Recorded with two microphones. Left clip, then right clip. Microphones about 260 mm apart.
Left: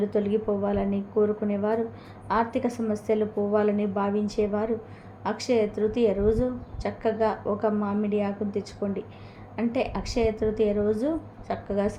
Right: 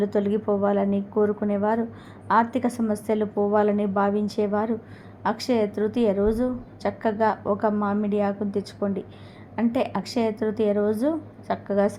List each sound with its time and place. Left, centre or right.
0.0 s a woman's voice: right